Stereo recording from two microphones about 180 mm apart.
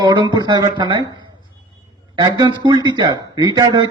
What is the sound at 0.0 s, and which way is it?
A man's voice, 25° right (ahead or behind).